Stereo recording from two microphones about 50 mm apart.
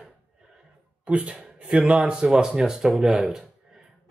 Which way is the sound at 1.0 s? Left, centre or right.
Right.